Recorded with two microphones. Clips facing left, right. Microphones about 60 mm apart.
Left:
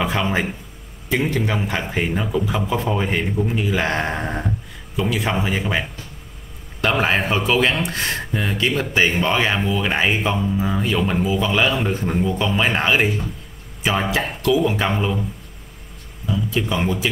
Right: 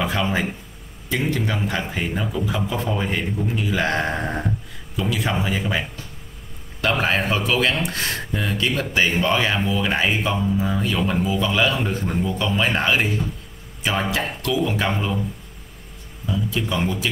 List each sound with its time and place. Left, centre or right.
0.0 s speech: centre
2.0 s speech: left
16.5 s speech: centre